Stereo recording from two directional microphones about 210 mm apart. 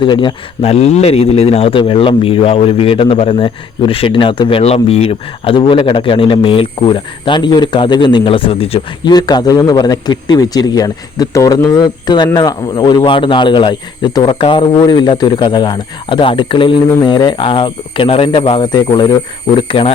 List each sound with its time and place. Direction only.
0.0 s speech: 20° left (ahead or behind)